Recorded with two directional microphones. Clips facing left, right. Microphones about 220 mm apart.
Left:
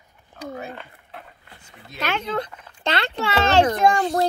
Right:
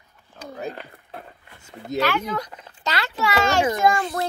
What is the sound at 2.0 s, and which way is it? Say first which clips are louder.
Speech: left 2 dB; 25° left (ahead or behind).